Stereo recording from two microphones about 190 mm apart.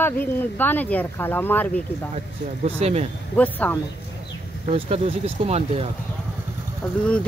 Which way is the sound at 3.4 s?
10° left (ahead or behind).